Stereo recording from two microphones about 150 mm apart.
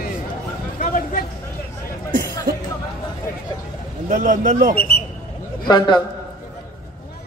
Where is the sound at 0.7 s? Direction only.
60° left (ahead or behind).